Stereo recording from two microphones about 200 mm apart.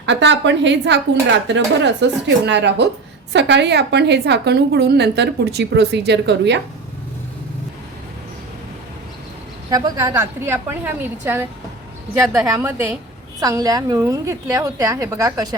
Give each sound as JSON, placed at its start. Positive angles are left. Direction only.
{"t": 0.0, "sound": "a woman's voice", "side_deg": -60}
{"t": 9.6, "sound": "a woman's voice", "side_deg": -20}